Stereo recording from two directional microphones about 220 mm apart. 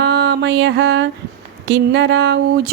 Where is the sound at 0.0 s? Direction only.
50° right (ahead or behind).